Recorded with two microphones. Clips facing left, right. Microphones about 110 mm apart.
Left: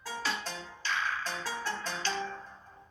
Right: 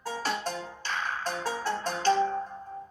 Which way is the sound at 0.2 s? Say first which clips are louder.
Right 4 dB; 50° right (ahead or behind).